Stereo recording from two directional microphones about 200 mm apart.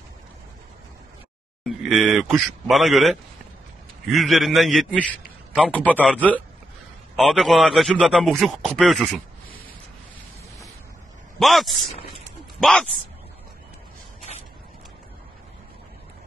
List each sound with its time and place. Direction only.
1.8 s speech: centre (ahead or behind)
7.2 s speech: centre (ahead or behind)
11.3 s speech: centre (ahead or behind)
11.9 s speech: 30° left (ahead or behind)
12.5 s speech: centre (ahead or behind)